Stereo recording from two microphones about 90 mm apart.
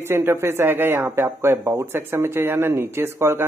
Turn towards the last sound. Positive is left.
turn(degrees=-30)  # may be behind; listen again after turning